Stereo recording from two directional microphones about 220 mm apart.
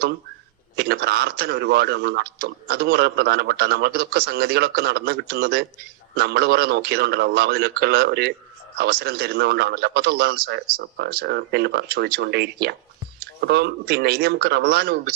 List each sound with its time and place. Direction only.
0.8 s a man's voice: 45° right (ahead or behind)